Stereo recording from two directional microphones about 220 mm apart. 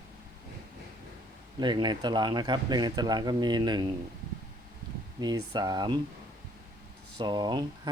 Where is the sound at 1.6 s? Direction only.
20° right (ahead or behind).